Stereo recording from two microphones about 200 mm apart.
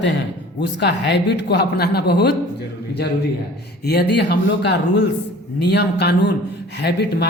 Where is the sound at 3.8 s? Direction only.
55° left (ahead or behind).